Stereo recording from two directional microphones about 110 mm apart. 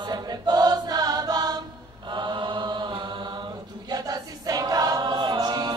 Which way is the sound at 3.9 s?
35° right (ahead or behind).